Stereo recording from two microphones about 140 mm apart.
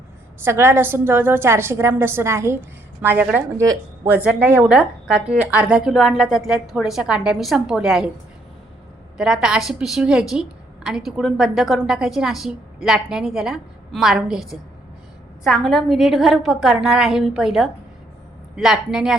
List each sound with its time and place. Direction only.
0.3 s a woman's voice: 15° right (ahead or behind)
9.1 s speech: 5° right (ahead or behind)